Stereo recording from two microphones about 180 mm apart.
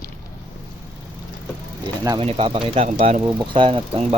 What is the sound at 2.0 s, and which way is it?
Speech, 25° right (ahead or behind).